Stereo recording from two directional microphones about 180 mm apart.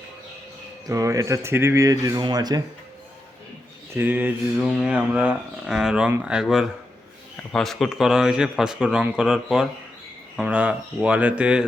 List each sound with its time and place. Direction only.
0.9 s speech: 20° right (ahead or behind)
3.9 s a man's voice: 10° right (ahead or behind)